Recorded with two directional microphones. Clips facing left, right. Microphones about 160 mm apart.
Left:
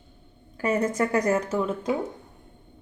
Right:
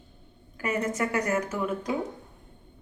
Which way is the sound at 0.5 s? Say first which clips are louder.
Left 5 dB; 35° left (ahead or behind).